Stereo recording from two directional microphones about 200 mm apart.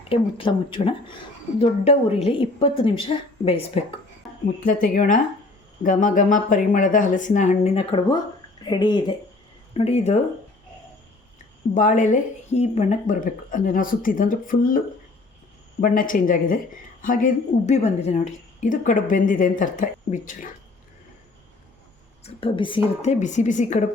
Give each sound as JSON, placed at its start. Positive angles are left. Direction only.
{"t": 0.1, "sound": "a woman's voice", "side_deg": 25}
{"t": 4.6, "sound": "a woman's voice", "side_deg": 45}
{"t": 11.7, "sound": "speech", "side_deg": 40}
{"t": 15.8, "sound": "a woman's voice", "side_deg": 45}
{"t": 22.2, "sound": "speech", "side_deg": 25}